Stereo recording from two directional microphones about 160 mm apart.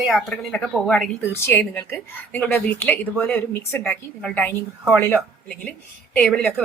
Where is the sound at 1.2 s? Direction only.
15° left (ahead or behind).